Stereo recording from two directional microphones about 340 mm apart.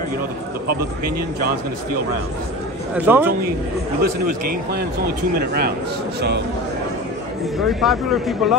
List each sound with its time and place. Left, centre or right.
2.9 s speech: centre
4.0 s a man's voice: right
7.5 s speech: centre